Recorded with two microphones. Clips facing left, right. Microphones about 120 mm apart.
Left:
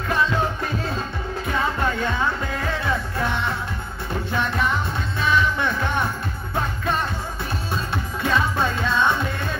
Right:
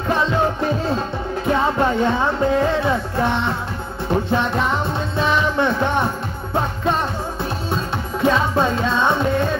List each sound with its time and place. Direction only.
1.5 s music: 25° right (ahead or behind)